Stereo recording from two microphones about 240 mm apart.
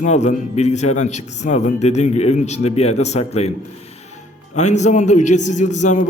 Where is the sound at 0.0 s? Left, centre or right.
Left.